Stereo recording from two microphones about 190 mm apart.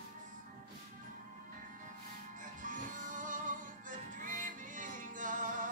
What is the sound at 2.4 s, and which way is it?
Music, 45° right (ahead or behind).